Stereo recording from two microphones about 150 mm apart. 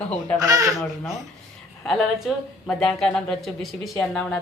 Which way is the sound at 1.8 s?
Centre (ahead or behind).